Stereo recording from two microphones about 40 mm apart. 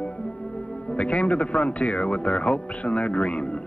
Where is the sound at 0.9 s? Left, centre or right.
Left.